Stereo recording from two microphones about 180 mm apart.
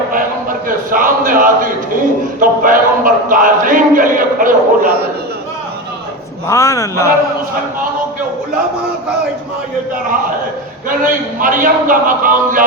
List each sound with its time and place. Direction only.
0.1 s a man's voice: 50° right (ahead or behind)
6.5 s speech: 15° left (ahead or behind)
10.8 s speech: 50° right (ahead or behind)